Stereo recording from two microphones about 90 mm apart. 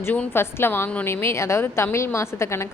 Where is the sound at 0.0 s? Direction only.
20° left (ahead or behind).